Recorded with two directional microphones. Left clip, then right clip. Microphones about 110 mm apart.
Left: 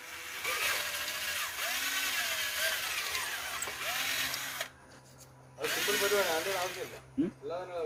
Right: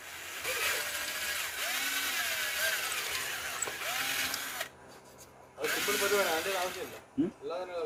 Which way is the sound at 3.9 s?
Centre (ahead or behind).